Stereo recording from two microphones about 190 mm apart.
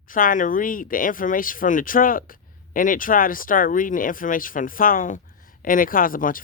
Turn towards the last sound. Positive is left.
turn(degrees=45)  # may be behind; listen again after turning